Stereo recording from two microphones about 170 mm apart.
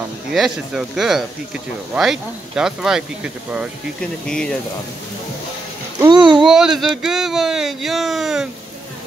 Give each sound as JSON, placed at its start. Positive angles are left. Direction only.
{"t": 0.3, "sound": "speech", "side_deg": 0}
{"t": 4.3, "sound": "speech", "side_deg": 5}
{"t": 5.9, "sound": "a sound", "side_deg": -25}
{"t": 6.3, "sound": "speech", "side_deg": -5}